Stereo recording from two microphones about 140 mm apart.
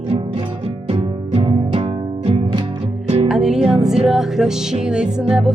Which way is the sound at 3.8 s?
5° right (ahead or behind).